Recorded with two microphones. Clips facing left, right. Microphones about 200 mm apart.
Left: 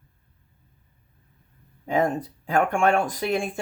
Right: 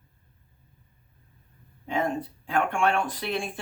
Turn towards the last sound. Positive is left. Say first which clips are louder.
# left 5 dB
turn(degrees=45)  # may be behind; listen again after turning